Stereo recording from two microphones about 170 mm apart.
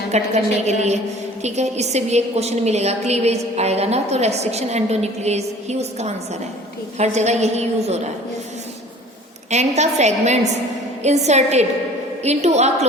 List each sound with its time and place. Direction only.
0.1 s a woman's voice: 40° right (ahead or behind)
9.5 s a woman's voice: 40° right (ahead or behind)